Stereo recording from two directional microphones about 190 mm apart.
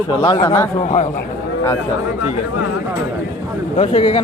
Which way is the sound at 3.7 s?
30° left (ahead or behind).